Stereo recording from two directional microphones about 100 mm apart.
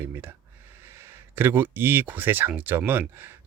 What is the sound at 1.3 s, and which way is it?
Speech, 20° right (ahead or behind).